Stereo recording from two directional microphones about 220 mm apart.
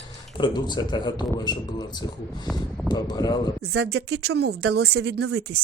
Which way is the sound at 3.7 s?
70° right (ahead or behind).